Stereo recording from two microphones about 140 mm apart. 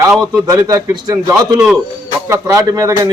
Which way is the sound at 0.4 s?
25° right (ahead or behind).